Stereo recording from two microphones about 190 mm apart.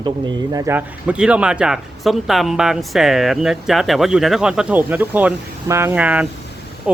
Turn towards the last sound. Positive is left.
turn(degrees=-5)  # may be behind; listen again after turning